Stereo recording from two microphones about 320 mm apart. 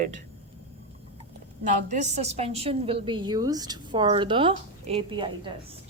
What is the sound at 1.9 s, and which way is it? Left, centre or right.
A woman's voice, right.